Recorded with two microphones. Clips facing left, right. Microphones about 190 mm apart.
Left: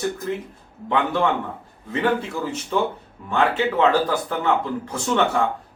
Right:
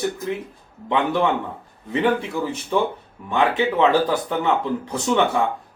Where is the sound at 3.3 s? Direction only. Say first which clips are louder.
Right 1 dB; 15° right (ahead or behind).